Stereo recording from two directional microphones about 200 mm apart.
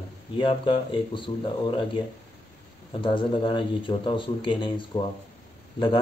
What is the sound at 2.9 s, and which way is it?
Speech, 25° left (ahead or behind).